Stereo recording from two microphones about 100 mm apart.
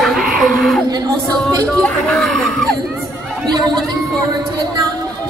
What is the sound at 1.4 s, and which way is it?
Speech, 5° left (ahead or behind).